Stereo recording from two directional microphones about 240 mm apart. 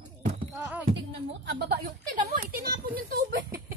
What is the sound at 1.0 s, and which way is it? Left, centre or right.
A child's voice, right.